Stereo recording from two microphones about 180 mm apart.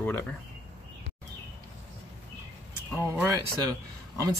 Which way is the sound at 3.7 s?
20° right (ahead or behind).